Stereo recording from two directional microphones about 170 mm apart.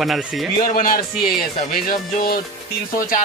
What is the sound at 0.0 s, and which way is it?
Speech, centre (ahead or behind).